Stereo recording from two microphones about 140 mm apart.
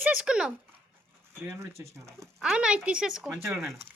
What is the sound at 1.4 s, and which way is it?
Speech, 20° right (ahead or behind).